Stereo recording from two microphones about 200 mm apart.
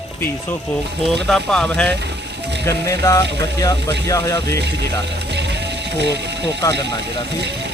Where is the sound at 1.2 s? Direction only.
5° left (ahead or behind).